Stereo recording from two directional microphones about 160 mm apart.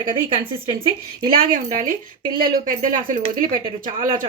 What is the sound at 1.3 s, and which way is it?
A woman's voice, 60° right (ahead or behind).